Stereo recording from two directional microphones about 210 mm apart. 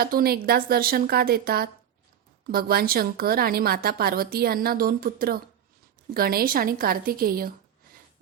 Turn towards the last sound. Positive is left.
turn(degrees=-45)  # may be behind; listen again after turning